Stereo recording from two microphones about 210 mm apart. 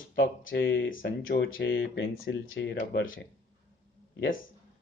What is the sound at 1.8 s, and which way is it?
Speech, 65° left (ahead or behind).